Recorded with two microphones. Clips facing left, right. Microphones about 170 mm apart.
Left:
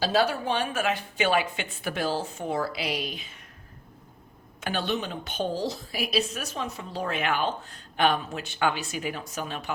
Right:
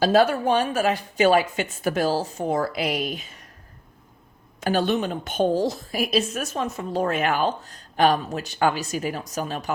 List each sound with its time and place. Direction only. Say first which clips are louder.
0.0 s a woman's voice: right 6 dB; 50° right (ahead or behind)
4.6 s a woman's voice: right 7 dB; 45° right (ahead or behind)